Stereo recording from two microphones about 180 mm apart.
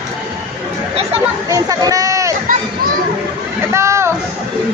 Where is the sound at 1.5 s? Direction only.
20° right (ahead or behind).